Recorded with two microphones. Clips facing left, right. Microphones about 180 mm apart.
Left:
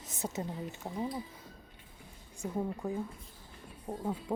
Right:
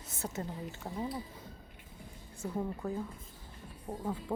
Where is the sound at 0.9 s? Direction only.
Centre (ahead or behind).